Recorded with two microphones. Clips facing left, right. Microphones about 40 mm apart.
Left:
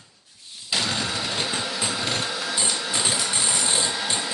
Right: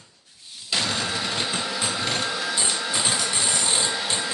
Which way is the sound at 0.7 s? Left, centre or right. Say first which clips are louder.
Even; centre.